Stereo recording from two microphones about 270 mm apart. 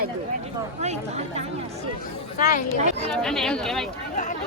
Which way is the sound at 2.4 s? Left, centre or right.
Left.